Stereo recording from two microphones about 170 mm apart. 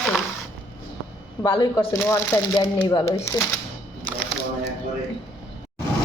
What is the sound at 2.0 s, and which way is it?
Speech, 15° left (ahead or behind).